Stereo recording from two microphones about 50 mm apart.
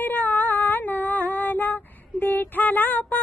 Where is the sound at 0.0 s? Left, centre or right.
Left.